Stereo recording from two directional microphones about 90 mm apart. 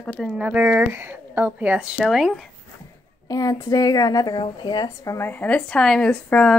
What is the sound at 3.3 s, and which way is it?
A woman's voice, 40° left (ahead or behind).